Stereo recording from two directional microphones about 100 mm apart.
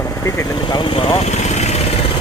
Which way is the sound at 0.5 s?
50° left (ahead or behind).